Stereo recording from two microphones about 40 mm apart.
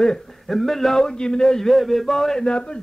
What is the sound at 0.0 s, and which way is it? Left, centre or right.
A man's voice, centre.